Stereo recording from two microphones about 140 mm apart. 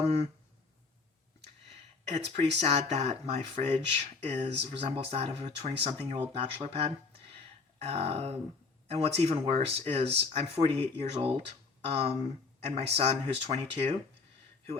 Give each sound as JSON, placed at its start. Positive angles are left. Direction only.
{"t": 1.7, "sound": "speech", "side_deg": -50}